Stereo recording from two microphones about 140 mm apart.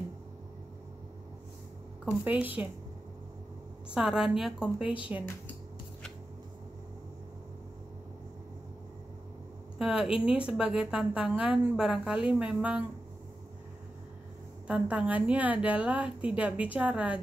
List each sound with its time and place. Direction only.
2.0 s a woman's voice: 10° right (ahead or behind)
3.9 s a woman's voice: 5° right (ahead or behind)
4.8 s speech: 35° left (ahead or behind)
9.8 s a woman's voice: 5° right (ahead or behind)
14.7 s a woman's voice: 10° right (ahead or behind)